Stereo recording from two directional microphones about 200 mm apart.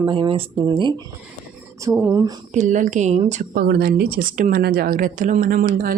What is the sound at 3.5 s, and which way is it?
A woman's voice, 50° right (ahead or behind).